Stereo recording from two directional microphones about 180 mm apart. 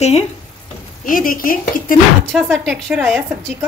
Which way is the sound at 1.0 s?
50° left (ahead or behind).